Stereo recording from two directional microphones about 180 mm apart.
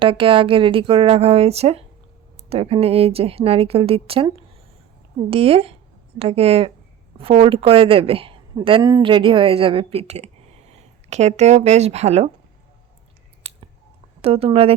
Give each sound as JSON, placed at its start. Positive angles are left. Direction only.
{"t": 0.0, "sound": "a woman's voice", "side_deg": -30}
{"t": 13.5, "sound": "a sound", "side_deg": -35}
{"t": 14.2, "sound": "a woman's voice", "side_deg": -30}